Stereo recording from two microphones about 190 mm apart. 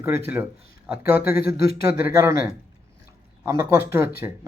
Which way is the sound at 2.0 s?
10° right (ahead or behind).